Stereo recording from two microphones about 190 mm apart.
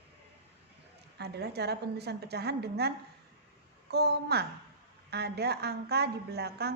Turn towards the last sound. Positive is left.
turn(degrees=-60)  # may be behind; listen again after turning